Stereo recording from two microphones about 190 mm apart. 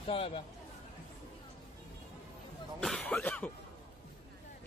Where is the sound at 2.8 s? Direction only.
5° left (ahead or behind).